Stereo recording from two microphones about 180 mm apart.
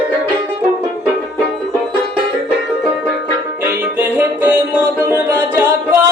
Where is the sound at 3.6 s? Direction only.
10° right (ahead or behind).